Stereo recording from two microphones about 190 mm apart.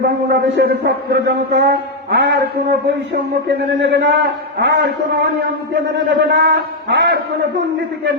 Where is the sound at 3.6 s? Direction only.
60° right (ahead or behind).